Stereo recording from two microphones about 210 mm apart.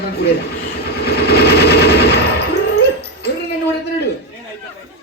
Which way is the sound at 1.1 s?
50° left (ahead or behind).